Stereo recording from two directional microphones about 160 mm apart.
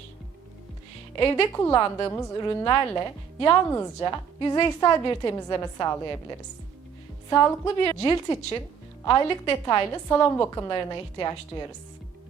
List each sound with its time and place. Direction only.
1.2 s a woman's voice: 15° left (ahead or behind)
7.3 s a woman's voice: 20° left (ahead or behind)